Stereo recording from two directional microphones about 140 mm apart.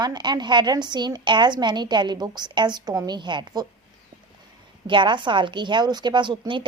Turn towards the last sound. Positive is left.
turn(degrees=-35)  # may be behind; listen again after turning